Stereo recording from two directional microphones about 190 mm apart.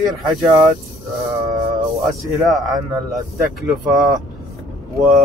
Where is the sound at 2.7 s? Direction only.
20° right (ahead or behind).